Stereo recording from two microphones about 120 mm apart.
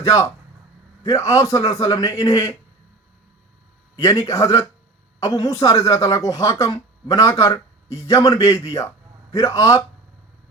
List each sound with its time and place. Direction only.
0.0 s speech: 30° left (ahead or behind)
3.9 s speech: 30° left (ahead or behind)